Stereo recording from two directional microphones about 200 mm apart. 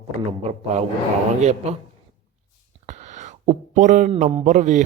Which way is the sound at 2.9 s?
35° right (ahead or behind).